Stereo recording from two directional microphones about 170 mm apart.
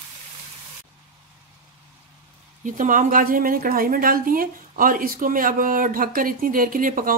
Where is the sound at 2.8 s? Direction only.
50° right (ahead or behind).